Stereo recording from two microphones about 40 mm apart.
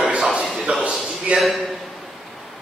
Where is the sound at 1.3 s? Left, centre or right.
Right.